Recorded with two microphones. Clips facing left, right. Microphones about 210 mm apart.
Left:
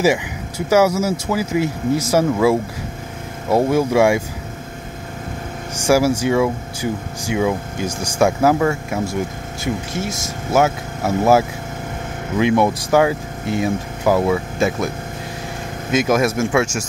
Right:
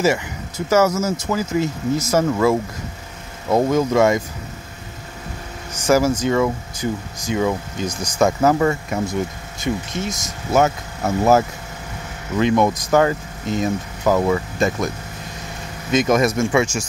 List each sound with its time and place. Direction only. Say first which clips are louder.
0.0 s speech: left 2 dB; 15° left (ahead or behind)
5.9 s speech: left 1 dB; 10° left (ahead or behind)
7.9 s speech: left 3 dB; 30° left (ahead or behind)
8.2 s speech: left 1 dB; 10° left (ahead or behind)
15.9 s speech: even; 5° left (ahead or behind)